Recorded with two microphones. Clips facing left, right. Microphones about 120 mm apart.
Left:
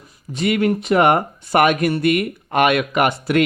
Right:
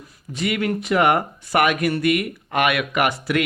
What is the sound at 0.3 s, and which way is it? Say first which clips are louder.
Speech: left 5 dB; 35° left (ahead or behind).